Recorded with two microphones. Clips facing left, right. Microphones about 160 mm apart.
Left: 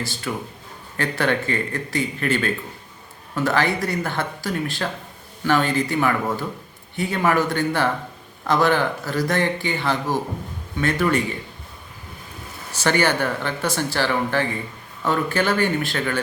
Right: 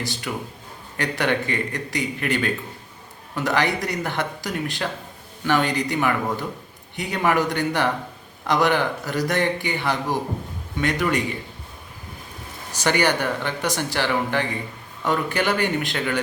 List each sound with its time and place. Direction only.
0.3 s speech: 10° right (ahead or behind)
12.7 s speech: 15° right (ahead or behind)